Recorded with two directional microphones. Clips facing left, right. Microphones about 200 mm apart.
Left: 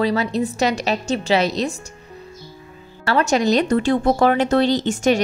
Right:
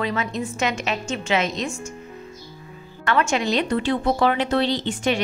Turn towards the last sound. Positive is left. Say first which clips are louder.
# left 5 dB
turn(degrees=45)  # may be behind; listen again after turning